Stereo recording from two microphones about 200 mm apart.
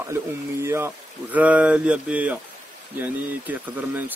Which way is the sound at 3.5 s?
10° right (ahead or behind).